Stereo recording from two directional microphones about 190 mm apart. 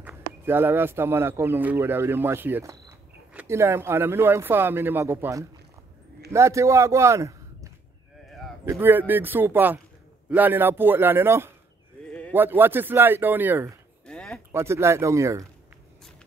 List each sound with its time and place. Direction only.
0.5 s a man's voice: 10° right (ahead or behind)
12.1 s sheep: 5° left (ahead or behind)
12.4 s a man's voice: 10° right (ahead or behind)
14.0 s a sound: 5° left (ahead or behind)
14.5 s a man's voice: 15° right (ahead or behind)